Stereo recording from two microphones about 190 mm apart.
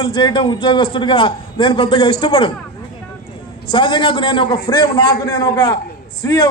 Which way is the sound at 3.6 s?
25° left (ahead or behind).